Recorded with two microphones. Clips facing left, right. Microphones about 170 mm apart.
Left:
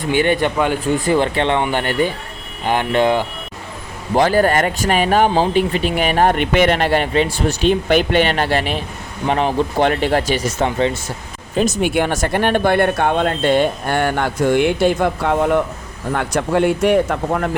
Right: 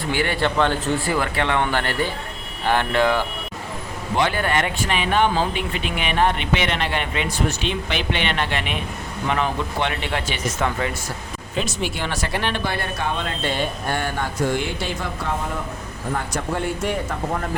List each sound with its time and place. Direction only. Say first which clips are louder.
0.1 s speech: left 6 dB; 20° left (ahead or behind)
4.1 s speech: left 7 dB; 40° left (ahead or behind)
11.5 s speech: left 8 dB; 45° left (ahead or behind)
11.9 s a man's voice: left 9 dB; 55° left (ahead or behind); by 17.6 s 70° left (ahead or behind)